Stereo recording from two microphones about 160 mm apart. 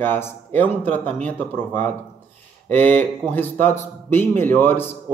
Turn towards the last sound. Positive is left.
turn(degrees=10)  # may be behind; listen again after turning